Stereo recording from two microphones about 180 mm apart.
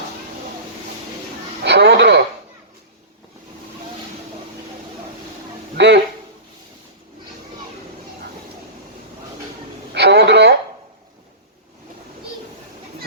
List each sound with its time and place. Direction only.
1.6 s a sound: 65° right (ahead or behind)
5.7 s speech: 70° right (ahead or behind)
9.9 s radio: 70° right (ahead or behind)